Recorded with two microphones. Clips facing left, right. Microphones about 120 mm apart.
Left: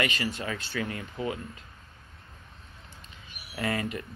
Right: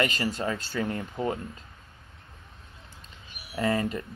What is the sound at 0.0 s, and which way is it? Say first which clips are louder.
Speech: right 3 dB; 35° right (ahead or behind).